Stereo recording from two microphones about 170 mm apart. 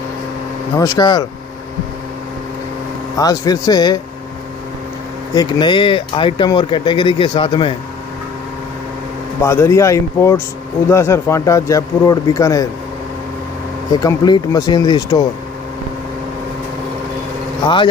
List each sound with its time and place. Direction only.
0.7 s speech: 20° left (ahead or behind)
3.2 s speech: 20° left (ahead or behind)
5.3 s speech: 25° left (ahead or behind)
9.4 s a man's voice: 15° left (ahead or behind)
13.9 s speech: 25° left (ahead or behind)